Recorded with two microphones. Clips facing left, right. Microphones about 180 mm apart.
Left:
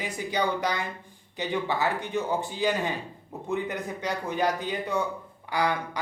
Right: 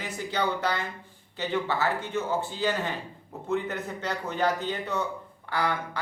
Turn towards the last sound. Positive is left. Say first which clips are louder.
# left 2 dB
turn(degrees=15)  # may be behind; listen again after turning